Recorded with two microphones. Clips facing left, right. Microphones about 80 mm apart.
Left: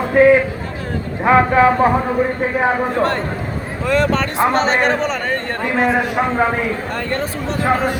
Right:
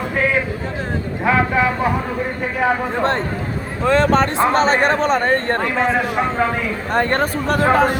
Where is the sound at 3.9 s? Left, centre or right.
Right.